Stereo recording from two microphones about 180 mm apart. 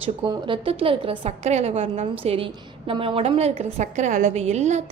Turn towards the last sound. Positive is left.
turn(degrees=-40)  # may be behind; listen again after turning